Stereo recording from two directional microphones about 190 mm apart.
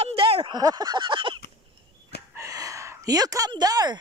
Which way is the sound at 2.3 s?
15° right (ahead or behind).